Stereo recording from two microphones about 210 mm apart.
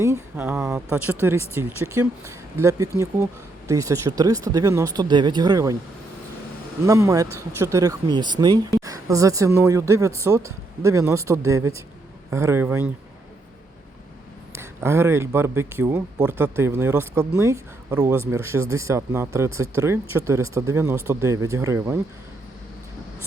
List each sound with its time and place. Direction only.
0.0 s speech: 10° right (ahead or behind)
6.8 s speech: 15° right (ahead or behind)
14.5 s speech: 10° right (ahead or behind)